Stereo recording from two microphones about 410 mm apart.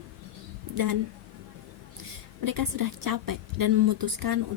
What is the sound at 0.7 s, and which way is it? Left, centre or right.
Speech, right.